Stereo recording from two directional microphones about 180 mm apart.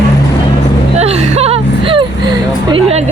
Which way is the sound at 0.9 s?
35° right (ahead or behind).